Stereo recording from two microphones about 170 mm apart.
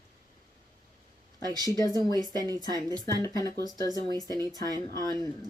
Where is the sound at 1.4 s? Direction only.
25° right (ahead or behind).